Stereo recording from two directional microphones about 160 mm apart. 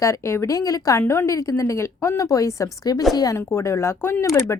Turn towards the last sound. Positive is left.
turn(degrees=15)  # may be behind; listen again after turning